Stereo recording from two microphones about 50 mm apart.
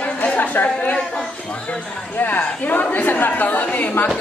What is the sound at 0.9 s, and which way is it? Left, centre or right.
A woman's voice, left.